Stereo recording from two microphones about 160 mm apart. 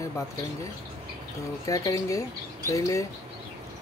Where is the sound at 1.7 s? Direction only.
20° left (ahead or behind).